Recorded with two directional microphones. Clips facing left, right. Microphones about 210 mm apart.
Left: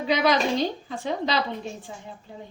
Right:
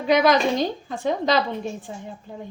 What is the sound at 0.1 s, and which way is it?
A woman's voice, 50° right (ahead or behind).